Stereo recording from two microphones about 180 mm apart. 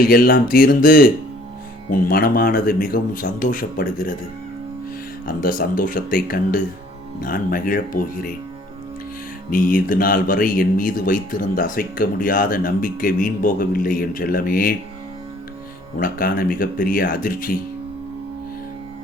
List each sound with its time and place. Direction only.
0.0 s speech: 55° left (ahead or behind)
5.2 s speech: 50° left (ahead or behind)
9.5 s speech: 50° left (ahead or behind)
16.0 s speech: 55° left (ahead or behind)